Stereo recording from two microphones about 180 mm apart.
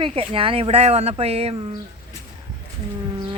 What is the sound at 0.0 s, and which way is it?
Speech, 30° right (ahead or behind).